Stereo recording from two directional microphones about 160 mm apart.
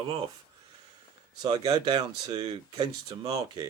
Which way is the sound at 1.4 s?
25° right (ahead or behind).